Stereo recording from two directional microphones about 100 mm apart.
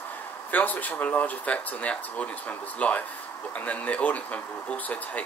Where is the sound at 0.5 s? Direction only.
15° left (ahead or behind).